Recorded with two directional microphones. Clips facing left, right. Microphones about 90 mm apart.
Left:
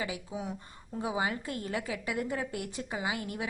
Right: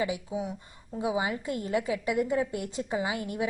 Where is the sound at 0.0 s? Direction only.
25° right (ahead or behind).